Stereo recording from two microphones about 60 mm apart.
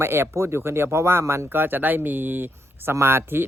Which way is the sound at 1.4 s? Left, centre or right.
Right.